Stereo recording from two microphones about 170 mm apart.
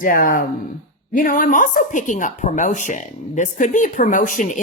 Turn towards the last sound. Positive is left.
turn(degrees=50)  # may be behind; listen again after turning